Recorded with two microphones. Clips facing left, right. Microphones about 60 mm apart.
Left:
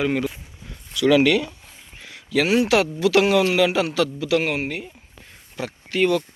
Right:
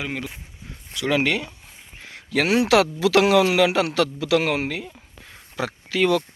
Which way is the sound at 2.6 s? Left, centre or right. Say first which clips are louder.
Right 1 dB; right.